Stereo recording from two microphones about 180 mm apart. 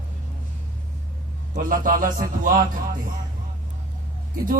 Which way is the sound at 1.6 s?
50° right (ahead or behind).